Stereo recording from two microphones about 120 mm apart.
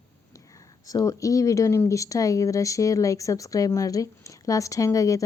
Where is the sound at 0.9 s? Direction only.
30° left (ahead or behind).